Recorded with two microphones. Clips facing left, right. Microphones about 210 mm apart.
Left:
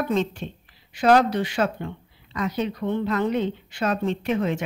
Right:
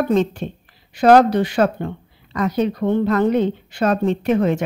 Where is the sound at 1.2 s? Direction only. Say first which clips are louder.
Right 6 dB; 40° right (ahead or behind).